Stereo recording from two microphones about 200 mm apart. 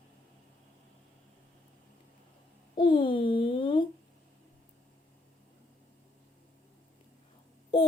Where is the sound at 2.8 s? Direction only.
20° left (ahead or behind).